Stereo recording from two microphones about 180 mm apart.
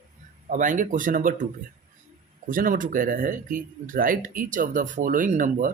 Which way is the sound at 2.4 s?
50° right (ahead or behind).